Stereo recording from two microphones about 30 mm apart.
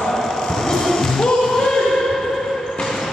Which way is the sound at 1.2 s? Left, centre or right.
Centre.